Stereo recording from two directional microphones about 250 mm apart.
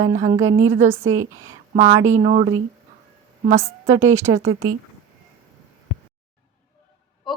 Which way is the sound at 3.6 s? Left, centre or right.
Centre.